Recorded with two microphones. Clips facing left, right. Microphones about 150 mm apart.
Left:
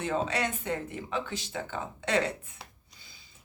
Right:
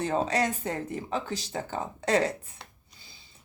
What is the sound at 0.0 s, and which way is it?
A woman's voice, 40° right (ahead or behind).